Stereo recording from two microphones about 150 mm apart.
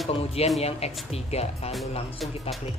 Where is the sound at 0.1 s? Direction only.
40° left (ahead or behind).